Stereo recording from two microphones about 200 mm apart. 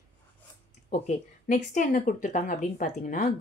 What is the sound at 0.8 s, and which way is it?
Speech, 40° left (ahead or behind).